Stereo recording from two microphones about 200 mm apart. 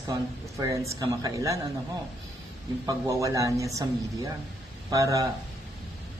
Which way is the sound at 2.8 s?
15° right (ahead or behind).